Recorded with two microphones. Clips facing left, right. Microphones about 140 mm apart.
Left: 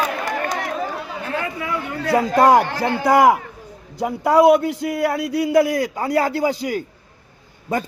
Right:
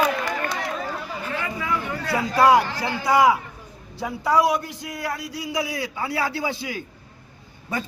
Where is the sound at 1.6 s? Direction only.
55° left (ahead or behind).